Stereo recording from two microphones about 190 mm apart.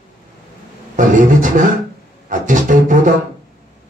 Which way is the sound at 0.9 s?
45° right (ahead or behind).